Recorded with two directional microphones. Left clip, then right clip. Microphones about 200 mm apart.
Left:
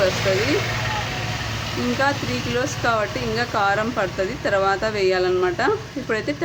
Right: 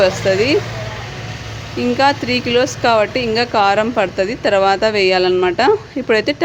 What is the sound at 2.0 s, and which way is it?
Speech, 35° right (ahead or behind).